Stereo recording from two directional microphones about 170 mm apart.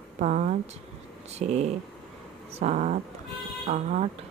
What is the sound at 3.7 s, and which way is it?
Speech, 40° right (ahead or behind).